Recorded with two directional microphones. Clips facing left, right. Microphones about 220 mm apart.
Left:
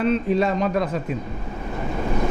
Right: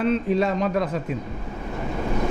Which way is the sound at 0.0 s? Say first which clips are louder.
Left 1 dB; 15° left (ahead or behind).